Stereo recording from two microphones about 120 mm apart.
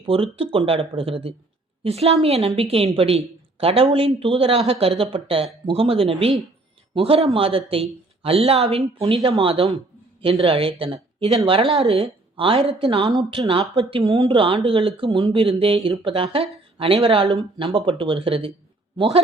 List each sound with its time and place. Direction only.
0.0 s a woman's voice: 50° right (ahead or behind)